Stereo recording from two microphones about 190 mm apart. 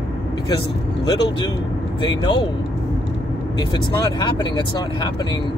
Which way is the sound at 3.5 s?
25° left (ahead or behind).